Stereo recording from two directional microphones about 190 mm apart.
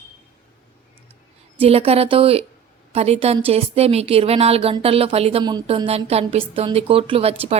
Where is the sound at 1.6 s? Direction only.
30° right (ahead or behind).